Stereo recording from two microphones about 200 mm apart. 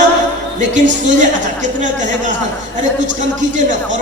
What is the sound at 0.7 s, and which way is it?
A man's voice, 40° right (ahead or behind).